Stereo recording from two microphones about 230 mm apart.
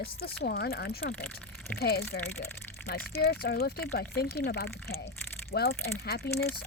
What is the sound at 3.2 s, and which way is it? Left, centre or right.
Speech, left.